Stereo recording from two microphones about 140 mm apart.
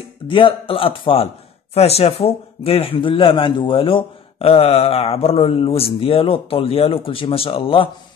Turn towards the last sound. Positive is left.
turn(degrees=40)  # may be behind; listen again after turning